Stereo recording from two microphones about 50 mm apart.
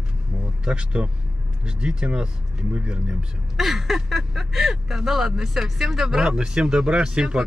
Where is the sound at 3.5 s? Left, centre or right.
Centre.